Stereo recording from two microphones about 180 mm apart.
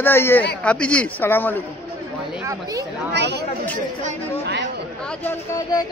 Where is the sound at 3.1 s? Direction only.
70° right (ahead or behind).